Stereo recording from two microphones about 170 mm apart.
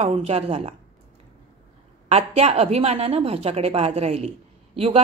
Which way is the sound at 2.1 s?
40° right (ahead or behind).